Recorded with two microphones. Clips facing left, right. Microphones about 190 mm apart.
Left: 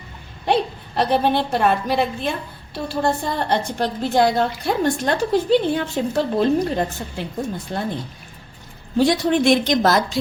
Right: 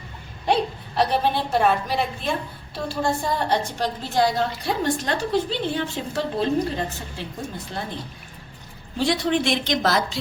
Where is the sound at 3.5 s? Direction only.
60° left (ahead or behind).